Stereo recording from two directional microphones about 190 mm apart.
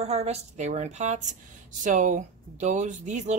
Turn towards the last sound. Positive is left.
turn(degrees=-40)  # may be behind; listen again after turning